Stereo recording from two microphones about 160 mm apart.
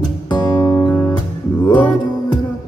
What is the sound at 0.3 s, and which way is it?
Music, 25° left (ahead or behind).